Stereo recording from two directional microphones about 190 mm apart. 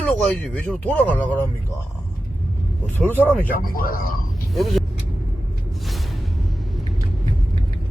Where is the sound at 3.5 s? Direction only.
50° left (ahead or behind).